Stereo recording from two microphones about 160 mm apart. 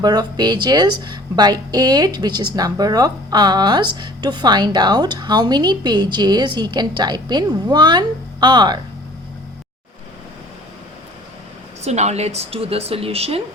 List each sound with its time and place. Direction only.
0.0 s speech: 25° right (ahead or behind)
11.8 s speech: 45° right (ahead or behind)